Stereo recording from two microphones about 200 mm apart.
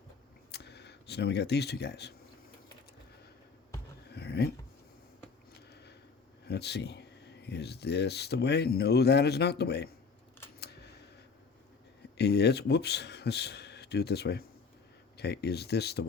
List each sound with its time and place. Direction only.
0.5 s speech: 55° left (ahead or behind)
4.1 s a sound: 55° left (ahead or behind)
6.4 s speech: 55° left (ahead or behind)
10.6 s camera: 55° left (ahead or behind)
12.1 s speech: 55° left (ahead or behind)